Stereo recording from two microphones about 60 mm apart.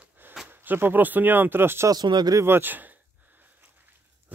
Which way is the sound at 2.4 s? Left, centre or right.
Right.